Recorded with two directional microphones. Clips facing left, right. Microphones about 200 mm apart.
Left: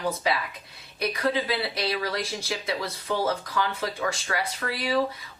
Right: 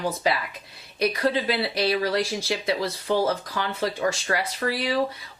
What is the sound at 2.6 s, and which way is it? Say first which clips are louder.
A woman's voice: right 5 dB; 30° right (ahead or behind).